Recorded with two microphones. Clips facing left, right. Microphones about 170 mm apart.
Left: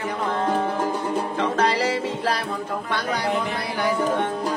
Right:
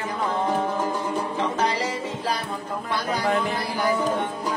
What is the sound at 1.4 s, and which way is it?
Music, 65° left (ahead or behind).